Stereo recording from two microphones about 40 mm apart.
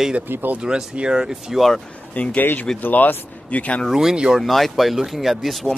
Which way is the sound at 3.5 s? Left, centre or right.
Left.